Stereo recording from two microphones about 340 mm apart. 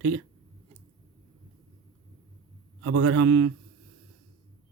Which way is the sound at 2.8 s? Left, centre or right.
Right.